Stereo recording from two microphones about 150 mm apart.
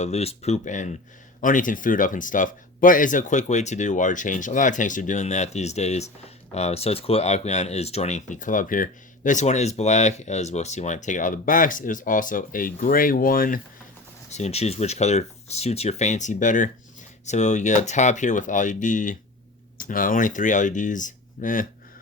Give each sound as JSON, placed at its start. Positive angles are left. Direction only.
{"t": 0.0, "sound": "speech", "side_deg": 45}
{"t": 14.3, "sound": "speech", "side_deg": 50}